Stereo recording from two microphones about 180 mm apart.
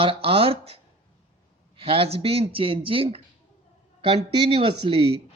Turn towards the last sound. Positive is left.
turn(degrees=-30)  # may be behind; listen again after turning